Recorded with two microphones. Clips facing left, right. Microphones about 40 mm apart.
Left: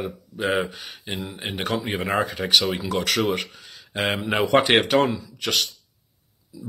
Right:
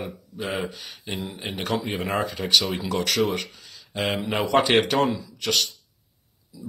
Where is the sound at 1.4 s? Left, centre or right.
Centre.